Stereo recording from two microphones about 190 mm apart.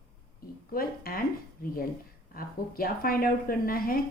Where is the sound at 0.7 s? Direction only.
50° left (ahead or behind).